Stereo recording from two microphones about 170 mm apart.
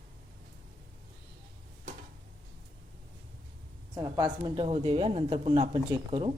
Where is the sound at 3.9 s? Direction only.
20° right (ahead or behind).